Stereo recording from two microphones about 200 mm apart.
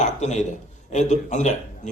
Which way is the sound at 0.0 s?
35° left (ahead or behind).